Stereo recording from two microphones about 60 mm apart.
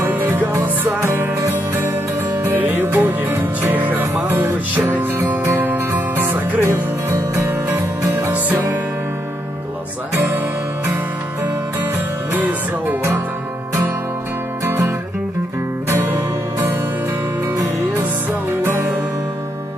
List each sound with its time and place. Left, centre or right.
0.1 s music: right
0.9 s music: right
2.6 s music: right
12.3 s music: right
14.6 s music: right
16.0 s music: right
18.6 s music: right